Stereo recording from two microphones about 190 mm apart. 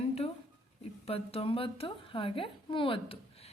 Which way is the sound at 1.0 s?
30° left (ahead or behind).